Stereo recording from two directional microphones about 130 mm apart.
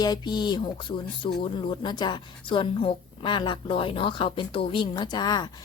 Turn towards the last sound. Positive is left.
turn(degrees=30)  # may be behind; listen again after turning